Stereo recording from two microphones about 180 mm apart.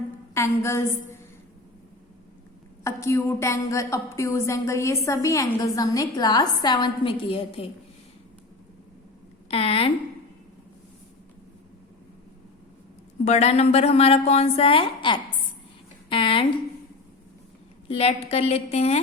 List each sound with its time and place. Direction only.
0.3 s a woman's voice: 15° left (ahead or behind)
2.8 s a woman's voice: 15° left (ahead or behind); by 7.7 s 30° left (ahead or behind)
9.5 s a woman's voice: 35° left (ahead or behind)
13.2 s a woman's voice: 35° left (ahead or behind)
17.8 s a woman's voice: 35° left (ahead or behind)